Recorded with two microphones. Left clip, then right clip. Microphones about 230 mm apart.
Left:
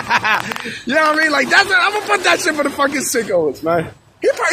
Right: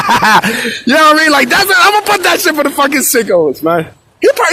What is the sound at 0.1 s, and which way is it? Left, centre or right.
Speech, right.